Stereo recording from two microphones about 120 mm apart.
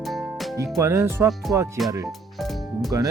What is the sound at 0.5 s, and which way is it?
Speech, 25° right (ahead or behind).